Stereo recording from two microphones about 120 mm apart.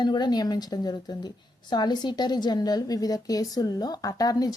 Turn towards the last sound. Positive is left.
turn(degrees=30)  # may be behind; listen again after turning